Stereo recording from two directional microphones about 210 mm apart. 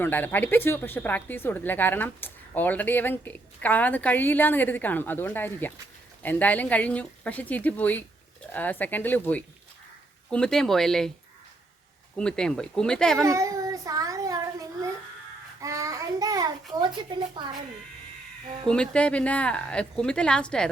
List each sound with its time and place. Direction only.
0.0 s a woman's voice: 10° left (ahead or behind)
12.1 s a woman's voice: 5° left (ahead or behind)
13.2 s child singing: 15° right (ahead or behind)
16.7 s speech: 20° right (ahead or behind)
18.7 s a woman's voice: 5° left (ahead or behind)